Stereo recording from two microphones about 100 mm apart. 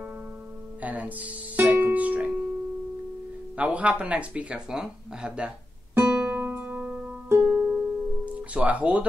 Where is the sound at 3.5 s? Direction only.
15° right (ahead or behind).